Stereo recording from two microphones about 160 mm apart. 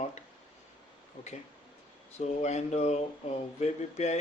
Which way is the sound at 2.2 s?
45° left (ahead or behind).